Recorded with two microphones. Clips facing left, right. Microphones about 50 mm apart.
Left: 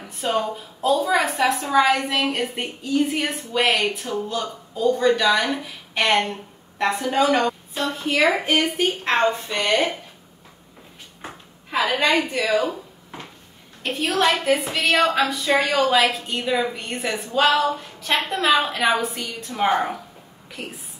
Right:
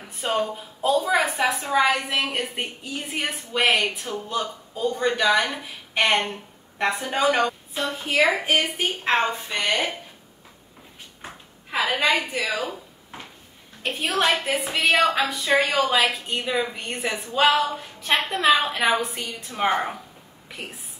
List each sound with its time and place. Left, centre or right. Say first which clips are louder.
0.0 s a woman's voice: left 2 dB; centre
5.4 s a woman's voice: left 2 dB; centre
11.7 s a woman's voice: left 2 dB; centre
12.6 s a sound: left 5 dB; centre
14.1 s a woman's voice: left 3 dB; centre
19.1 s a woman's voice: left 2 dB; right
19.5 s a woman's voice: left 3 dB; centre